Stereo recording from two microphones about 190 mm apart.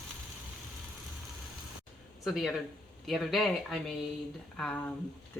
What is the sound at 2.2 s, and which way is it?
Speech, centre (ahead or behind).